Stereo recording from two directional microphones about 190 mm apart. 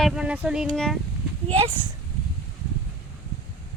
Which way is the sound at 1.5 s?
30° right (ahead or behind).